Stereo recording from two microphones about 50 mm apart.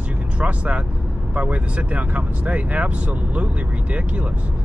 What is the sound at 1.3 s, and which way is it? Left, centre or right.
Speech, right.